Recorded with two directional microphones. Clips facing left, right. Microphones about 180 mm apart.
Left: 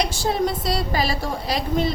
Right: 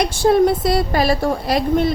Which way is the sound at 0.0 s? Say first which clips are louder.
Right 8 dB; 55° right (ahead or behind).